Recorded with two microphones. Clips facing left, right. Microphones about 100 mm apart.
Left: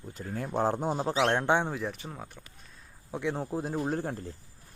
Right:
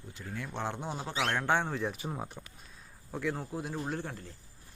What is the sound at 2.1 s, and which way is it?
Speech, 15° right (ahead or behind).